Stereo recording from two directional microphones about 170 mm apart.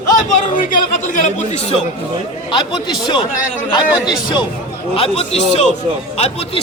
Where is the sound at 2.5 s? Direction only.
30° left (ahead or behind).